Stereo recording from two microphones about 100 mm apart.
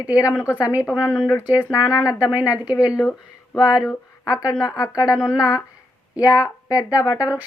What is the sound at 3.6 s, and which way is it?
Speech, 35° left (ahead or behind).